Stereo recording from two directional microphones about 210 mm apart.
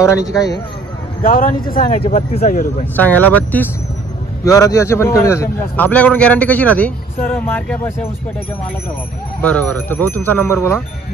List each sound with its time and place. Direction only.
0.0 s a man's voice: 15° left (ahead or behind)
1.2 s speech: 45° left (ahead or behind)
3.0 s a man's voice: 10° left (ahead or behind)
9.4 s a man's voice: 5° left (ahead or behind)